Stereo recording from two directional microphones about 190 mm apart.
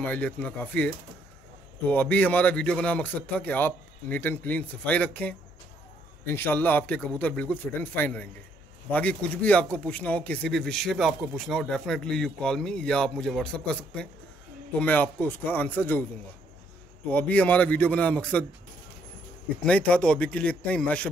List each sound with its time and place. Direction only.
0.0 s a man's voice: 5° left (ahead or behind)
17.1 s a man's voice: 10° left (ahead or behind)
19.6 s a man's voice: 5° left (ahead or behind)